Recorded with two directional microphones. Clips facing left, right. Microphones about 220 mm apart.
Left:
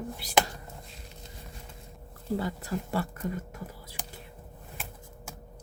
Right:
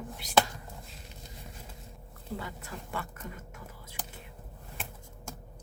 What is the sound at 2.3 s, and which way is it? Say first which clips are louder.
Speech: left 9 dB; 35° left (ahead or behind).